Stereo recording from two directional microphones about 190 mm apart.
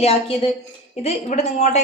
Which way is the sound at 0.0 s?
30° left (ahead or behind).